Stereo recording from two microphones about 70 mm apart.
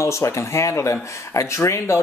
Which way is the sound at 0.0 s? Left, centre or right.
Left.